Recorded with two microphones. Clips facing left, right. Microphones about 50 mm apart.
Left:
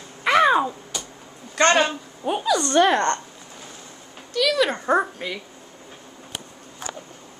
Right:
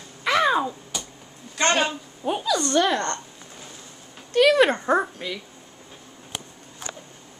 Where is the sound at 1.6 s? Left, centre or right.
Left.